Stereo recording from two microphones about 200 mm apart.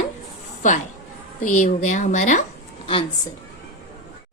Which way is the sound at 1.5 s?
40° left (ahead or behind).